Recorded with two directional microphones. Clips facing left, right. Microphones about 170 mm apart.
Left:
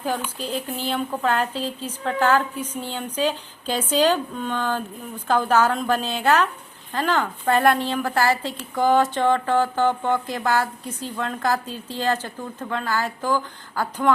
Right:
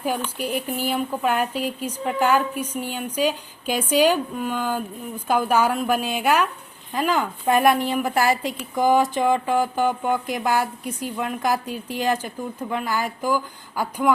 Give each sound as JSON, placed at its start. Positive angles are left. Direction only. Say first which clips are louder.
{"t": 0.3, "sound": "a woman's voice", "louder": "right 2 dB", "side_deg": -15}